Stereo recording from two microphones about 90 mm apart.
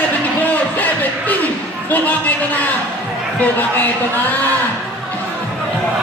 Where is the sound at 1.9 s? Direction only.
20° left (ahead or behind).